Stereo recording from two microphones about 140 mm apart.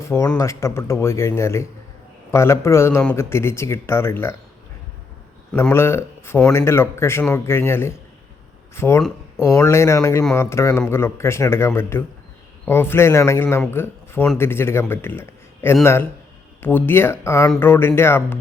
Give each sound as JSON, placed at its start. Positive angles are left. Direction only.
{"t": 0.3, "sound": "speech", "side_deg": 20}
{"t": 5.7, "sound": "speech", "side_deg": 20}